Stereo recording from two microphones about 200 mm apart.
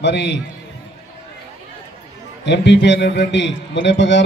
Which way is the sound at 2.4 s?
60° left (ahead or behind).